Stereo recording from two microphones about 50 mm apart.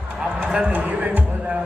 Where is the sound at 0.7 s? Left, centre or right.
Right.